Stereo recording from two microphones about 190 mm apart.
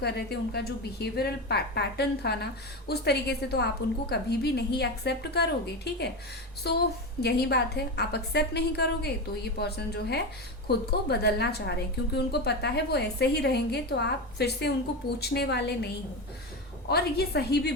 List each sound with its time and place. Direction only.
0.0 s a woman's voice: 55° left (ahead or behind)
16.9 s a woman's voice: 55° left (ahead or behind)